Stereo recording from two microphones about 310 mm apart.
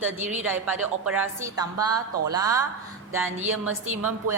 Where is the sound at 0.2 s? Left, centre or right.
Right.